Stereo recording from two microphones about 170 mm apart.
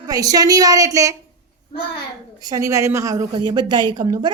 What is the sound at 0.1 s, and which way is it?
A woman's voice, 20° right (ahead or behind).